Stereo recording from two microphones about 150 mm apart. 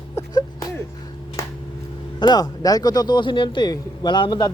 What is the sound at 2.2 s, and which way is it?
Speech, 25° left (ahead or behind).